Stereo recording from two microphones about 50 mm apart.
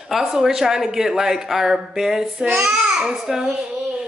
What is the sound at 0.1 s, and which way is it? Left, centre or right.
Speech, centre.